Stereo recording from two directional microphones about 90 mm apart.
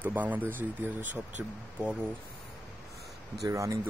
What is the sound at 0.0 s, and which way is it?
Speech, 20° right (ahead or behind).